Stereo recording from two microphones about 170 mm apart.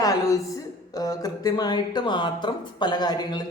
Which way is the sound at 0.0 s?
20° left (ahead or behind).